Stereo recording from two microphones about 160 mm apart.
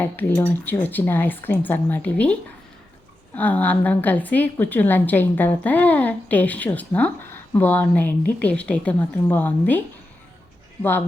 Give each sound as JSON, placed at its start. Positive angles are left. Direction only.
{"t": 0.0, "sound": "a woman's voice", "side_deg": 15}